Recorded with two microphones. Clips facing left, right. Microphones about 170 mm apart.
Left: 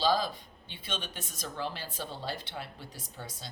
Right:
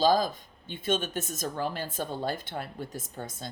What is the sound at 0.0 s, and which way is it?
Speech, 45° right (ahead or behind).